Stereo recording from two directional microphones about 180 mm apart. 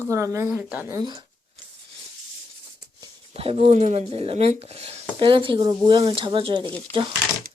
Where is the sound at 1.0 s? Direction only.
25° right (ahead or behind).